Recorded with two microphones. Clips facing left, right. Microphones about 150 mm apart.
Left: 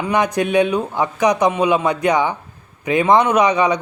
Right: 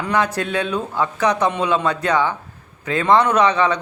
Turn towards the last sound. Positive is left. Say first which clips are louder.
# left 1 dB
turn(degrees=15)  # may be behind; listen again after turning